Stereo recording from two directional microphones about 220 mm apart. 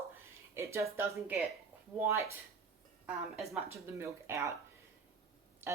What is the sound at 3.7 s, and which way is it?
Speech, 10° right (ahead or behind).